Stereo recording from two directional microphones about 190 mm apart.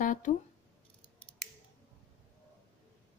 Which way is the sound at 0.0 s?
40° left (ahead or behind).